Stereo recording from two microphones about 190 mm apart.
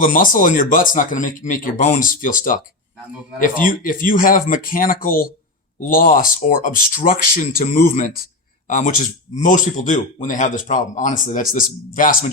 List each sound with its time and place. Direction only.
0.0 s speech: 45° left (ahead or behind)
3.7 s speech: 45° left (ahead or behind)